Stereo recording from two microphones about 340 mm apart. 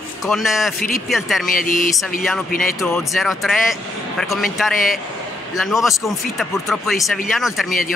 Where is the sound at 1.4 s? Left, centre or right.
Left.